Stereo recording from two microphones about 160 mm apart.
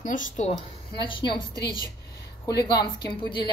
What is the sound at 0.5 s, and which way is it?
Speech, 30° left (ahead or behind).